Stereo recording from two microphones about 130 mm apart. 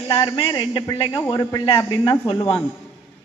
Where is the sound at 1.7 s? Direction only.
40° left (ahead or behind).